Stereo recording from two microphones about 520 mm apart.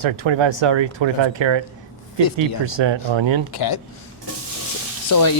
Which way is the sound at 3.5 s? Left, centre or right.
Left.